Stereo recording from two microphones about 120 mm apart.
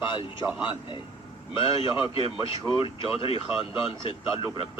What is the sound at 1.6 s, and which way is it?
Speech, 50° left (ahead or behind).